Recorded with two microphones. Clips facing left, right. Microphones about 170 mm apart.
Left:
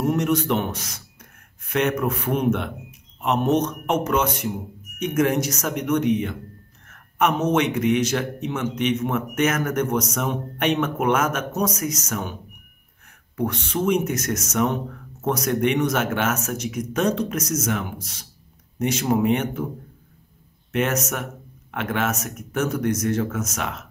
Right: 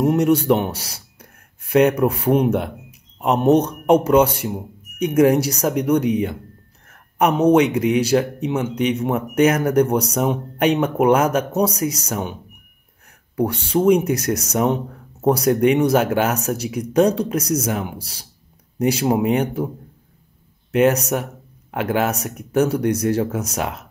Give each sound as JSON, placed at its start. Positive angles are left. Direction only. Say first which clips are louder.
{"t": 0.2, "sound": "speech", "louder": "right 6 dB", "side_deg": -30}
{"t": 6.9, "sound": "a sound", "louder": "right 3 dB", "side_deg": -35}
{"t": 7.4, "sound": "speech", "louder": "right 5 dB", "side_deg": -30}
{"t": 13.4, "sound": "speech", "louder": "right 6 dB", "side_deg": -30}
{"t": 20.7, "sound": "speech", "louder": "right 7 dB", "side_deg": -35}